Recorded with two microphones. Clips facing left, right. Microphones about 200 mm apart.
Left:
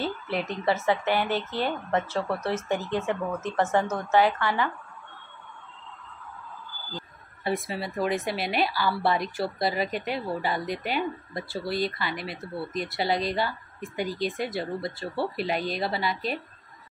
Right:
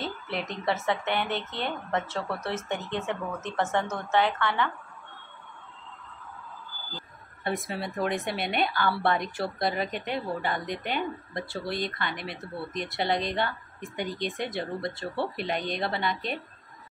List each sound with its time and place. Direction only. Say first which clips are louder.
0.0 s speech: left 4 dB; 35° left (ahead or behind)
0.7 s a woman's voice: left 3 dB; 5° left (ahead or behind)
3.1 s a woman's voice: left 4 dB; centre (ahead or behind)
7.4 s a woman's voice: left 2 dB; centre (ahead or behind)